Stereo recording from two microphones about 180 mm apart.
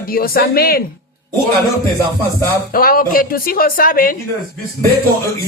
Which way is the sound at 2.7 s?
55° left (ahead or behind).